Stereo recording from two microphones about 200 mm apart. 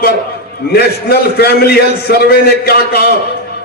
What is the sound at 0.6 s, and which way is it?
A man's voice, 50° left (ahead or behind).